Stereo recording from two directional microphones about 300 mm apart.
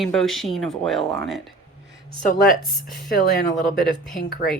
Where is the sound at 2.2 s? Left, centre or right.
Left.